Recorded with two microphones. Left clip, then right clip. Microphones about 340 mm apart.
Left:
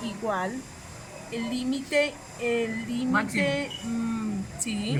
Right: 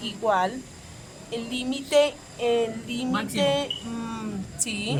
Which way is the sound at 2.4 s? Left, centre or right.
Right.